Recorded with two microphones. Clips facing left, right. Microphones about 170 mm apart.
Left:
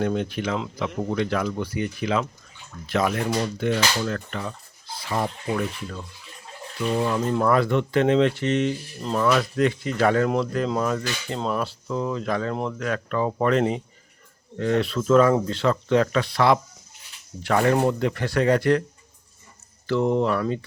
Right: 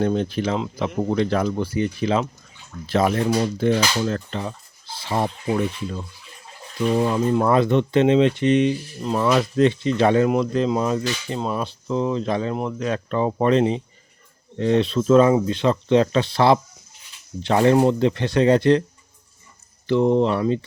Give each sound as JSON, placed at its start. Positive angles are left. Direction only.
{"t": 0.0, "sound": "speech", "side_deg": -30}
{"t": 9.2, "sound": "speech", "side_deg": -25}
{"t": 19.9, "sound": "speech", "side_deg": -20}